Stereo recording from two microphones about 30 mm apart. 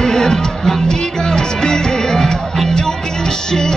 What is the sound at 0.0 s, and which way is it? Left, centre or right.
Music, centre.